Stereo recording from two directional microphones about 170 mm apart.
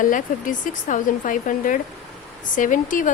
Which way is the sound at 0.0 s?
50° left (ahead or behind).